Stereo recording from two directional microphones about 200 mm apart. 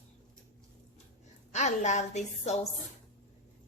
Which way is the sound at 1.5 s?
35° left (ahead or behind).